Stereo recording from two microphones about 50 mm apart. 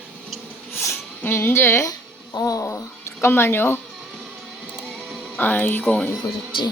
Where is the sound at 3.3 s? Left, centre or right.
Left.